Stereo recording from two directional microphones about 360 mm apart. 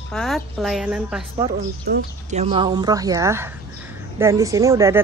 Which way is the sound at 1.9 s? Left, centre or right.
Right.